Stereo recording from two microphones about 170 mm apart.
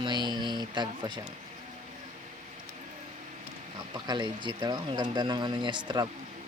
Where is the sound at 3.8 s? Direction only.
25° right (ahead or behind).